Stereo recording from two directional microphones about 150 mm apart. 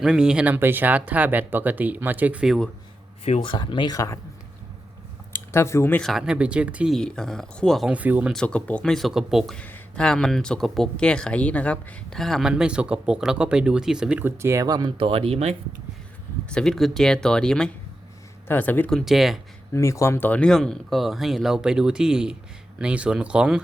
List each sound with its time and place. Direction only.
0.0 s speech: 5° right (ahead or behind)
3.2 s speech: 40° left (ahead or behind); by 4.2 s 20° left (ahead or behind)
5.5 s speech: 20° left (ahead or behind)
6.0 s speech: centre (ahead or behind)
8.3 s speech: 5° left (ahead or behind); by 15.5 s 40° right (ahead or behind)
16.5 s speech: 5° left (ahead or behind)
19.7 s speech: 20° left (ahead or behind); by 23.6 s 5° right (ahead or behind)